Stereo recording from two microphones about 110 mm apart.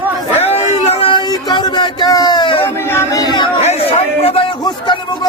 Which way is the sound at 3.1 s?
40° left (ahead or behind).